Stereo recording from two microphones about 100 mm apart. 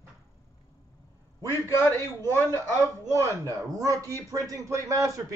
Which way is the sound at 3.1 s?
35° right (ahead or behind).